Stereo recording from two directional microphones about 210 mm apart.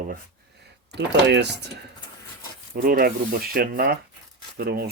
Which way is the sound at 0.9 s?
55° right (ahead or behind).